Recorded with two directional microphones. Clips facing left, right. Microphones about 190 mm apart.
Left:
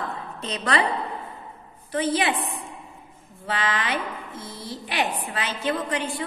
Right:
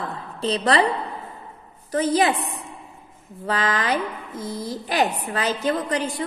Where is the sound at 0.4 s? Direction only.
35° right (ahead or behind).